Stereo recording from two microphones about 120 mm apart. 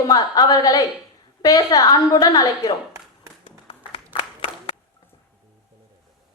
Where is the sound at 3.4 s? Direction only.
55° left (ahead or behind).